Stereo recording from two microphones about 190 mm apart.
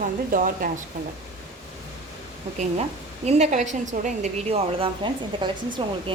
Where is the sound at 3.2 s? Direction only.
35° right (ahead or behind).